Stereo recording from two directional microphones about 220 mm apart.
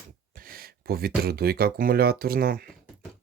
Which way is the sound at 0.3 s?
40° right (ahead or behind).